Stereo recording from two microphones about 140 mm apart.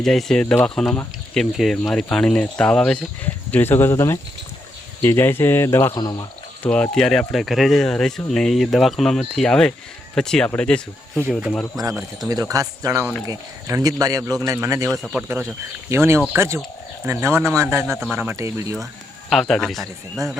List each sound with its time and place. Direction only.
0.0 s speech: 5° left (ahead or behind); by 5.9 s 20° left (ahead or behind)
5.9 s speech: 30° left (ahead or behind)
6.6 s speech: 10° left (ahead or behind)
12.3 s speech: 25° right (ahead or behind)
14.8 s speech: centre (ahead or behind)
15.1 s speech: 15° right (ahead or behind)
17.9 s speech: centre (ahead or behind)
18.2 s speech: 15° right (ahead or behind)
19.3 s speech: centre (ahead or behind)